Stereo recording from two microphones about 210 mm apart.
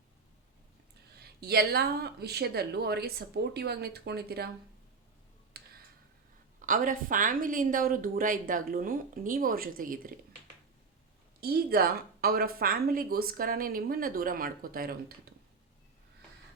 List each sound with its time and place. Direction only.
1.4 s a woman's voice: 50° right (ahead or behind)
5.5 s clicking: 50° right (ahead or behind)
6.6 s a woman's voice: 40° right (ahead or behind)
11.3 s a woman's voice: 45° right (ahead or behind)